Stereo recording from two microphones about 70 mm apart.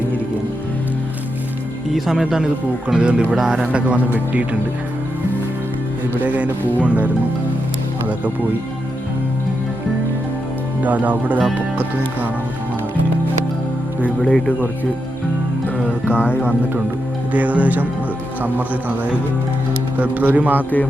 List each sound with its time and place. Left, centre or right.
1.9 s a man's voice: centre; by 4.4 s right
6.1 s speech: right
10.8 s speech: right
14.3 s speech: centre
15.9 s speech: right
17.3 s speech: right
20.0 s speech: right